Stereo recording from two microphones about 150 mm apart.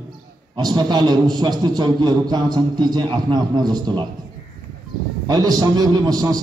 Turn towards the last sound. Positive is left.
turn(degrees=-25)  # may be behind; listen again after turning